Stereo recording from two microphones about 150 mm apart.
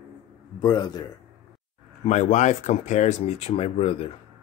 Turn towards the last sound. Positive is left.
turn(degrees=40)  # may be behind; listen again after turning